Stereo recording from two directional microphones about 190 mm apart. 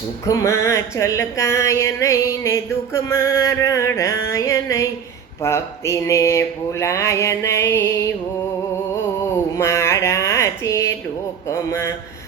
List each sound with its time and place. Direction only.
0.3 s music: 15° left (ahead or behind)
9.6 s a sound: 15° left (ahead or behind)
11.4 s music: 15° left (ahead or behind)